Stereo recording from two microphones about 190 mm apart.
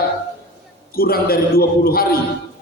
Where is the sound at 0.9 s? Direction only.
55° left (ahead or behind).